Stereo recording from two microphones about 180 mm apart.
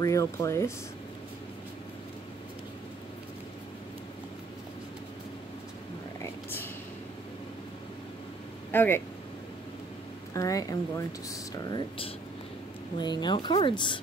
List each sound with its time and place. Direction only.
0.0 s speech: 15° left (ahead or behind)
8.7 s speech: 10° left (ahead or behind)
10.3 s speech: 20° left (ahead or behind)
12.9 s speech: 25° left (ahead or behind)